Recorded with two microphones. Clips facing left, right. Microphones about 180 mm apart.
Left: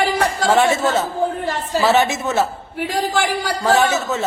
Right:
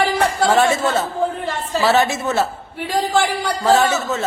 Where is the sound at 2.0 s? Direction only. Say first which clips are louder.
Even; 20° left (ahead or behind).